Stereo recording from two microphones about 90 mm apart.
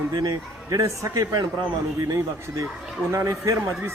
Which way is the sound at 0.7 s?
35° right (ahead or behind).